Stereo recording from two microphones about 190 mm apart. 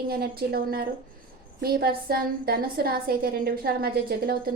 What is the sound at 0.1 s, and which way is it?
A woman's voice, 55° right (ahead or behind).